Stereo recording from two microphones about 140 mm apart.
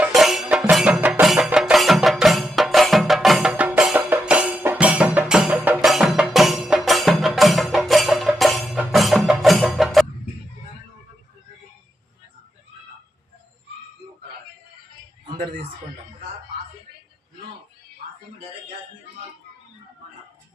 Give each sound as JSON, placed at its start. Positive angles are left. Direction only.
{"t": 0.1, "sound": "music", "side_deg": 0}